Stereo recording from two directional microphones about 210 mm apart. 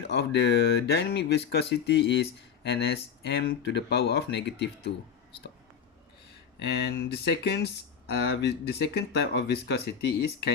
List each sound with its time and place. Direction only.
0.1 s speech: 50° left (ahead or behind)
6.8 s speech: 50° left (ahead or behind)